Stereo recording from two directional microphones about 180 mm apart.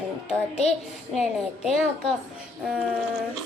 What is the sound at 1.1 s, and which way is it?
Speech, centre (ahead or behind).